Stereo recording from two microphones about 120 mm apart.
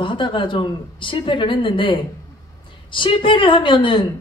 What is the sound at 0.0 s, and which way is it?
Speech, 45° left (ahead or behind).